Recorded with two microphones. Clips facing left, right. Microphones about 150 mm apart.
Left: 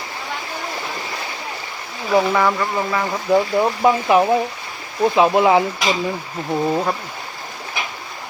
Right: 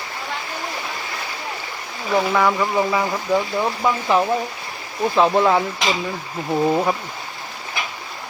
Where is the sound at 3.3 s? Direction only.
20° left (ahead or behind).